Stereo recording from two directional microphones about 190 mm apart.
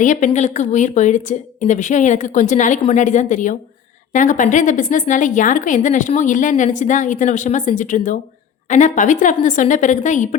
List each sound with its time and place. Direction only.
0.0 s a woman's voice: 40° left (ahead or behind)